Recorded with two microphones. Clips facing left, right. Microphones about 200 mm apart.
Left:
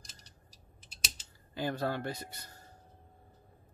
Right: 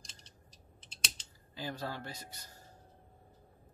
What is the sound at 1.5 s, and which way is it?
A man's voice, 60° left (ahead or behind).